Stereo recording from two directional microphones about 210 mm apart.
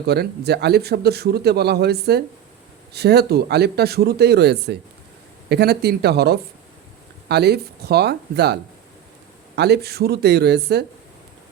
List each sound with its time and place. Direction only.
0.1 s speech: 50° right (ahead or behind)
9.6 s speech: 50° right (ahead or behind)